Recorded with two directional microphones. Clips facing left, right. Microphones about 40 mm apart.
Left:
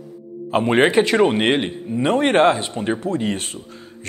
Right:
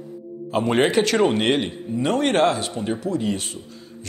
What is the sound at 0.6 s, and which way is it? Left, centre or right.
Speech, left.